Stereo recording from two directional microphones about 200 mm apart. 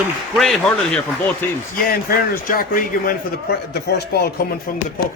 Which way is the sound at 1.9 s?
45° left (ahead or behind).